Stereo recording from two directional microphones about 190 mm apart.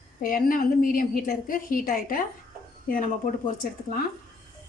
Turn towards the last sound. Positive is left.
turn(degrees=45)  # may be behind; listen again after turning